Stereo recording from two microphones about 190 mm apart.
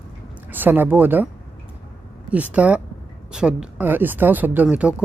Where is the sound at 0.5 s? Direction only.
10° right (ahead or behind).